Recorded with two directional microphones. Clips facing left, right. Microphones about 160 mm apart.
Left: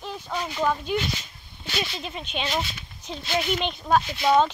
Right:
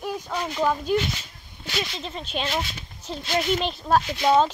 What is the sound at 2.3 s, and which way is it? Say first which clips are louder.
Speech: right 1 dB; centre (ahead or behind).